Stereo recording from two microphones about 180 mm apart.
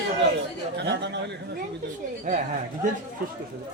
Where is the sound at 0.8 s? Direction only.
75° right (ahead or behind).